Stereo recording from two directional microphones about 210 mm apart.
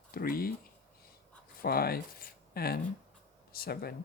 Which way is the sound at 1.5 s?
45° left (ahead or behind).